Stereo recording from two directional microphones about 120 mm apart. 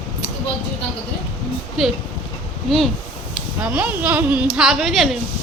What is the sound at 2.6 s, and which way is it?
Speech, centre (ahead or behind).